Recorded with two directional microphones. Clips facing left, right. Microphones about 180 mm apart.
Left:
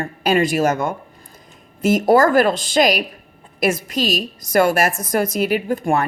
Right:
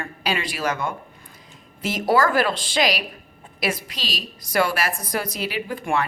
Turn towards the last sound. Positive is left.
turn(degrees=45)  # may be behind; listen again after turning